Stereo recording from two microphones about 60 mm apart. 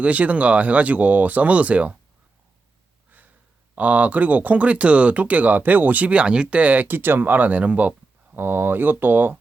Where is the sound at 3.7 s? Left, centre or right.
Right.